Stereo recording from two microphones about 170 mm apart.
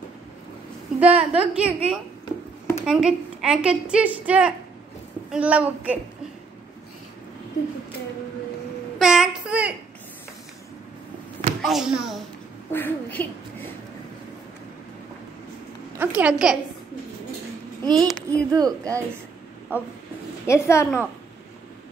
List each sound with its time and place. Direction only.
0.9 s a woman's voice: 10° right (ahead or behind)
8.9 s a sound: 5° right (ahead or behind)
11.6 s a woman's voice: 5° right (ahead or behind)
12.7 s speech: 10° left (ahead or behind)
16.0 s a woman's voice: 10° right (ahead or behind)
17.8 s a child's voice: 25° right (ahead or behind)
20.4 s a woman's voice: 15° left (ahead or behind)